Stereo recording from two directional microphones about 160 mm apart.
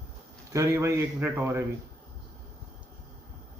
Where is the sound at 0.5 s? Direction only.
20° right (ahead or behind).